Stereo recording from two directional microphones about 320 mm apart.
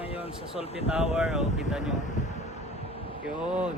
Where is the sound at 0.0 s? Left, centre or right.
Centre.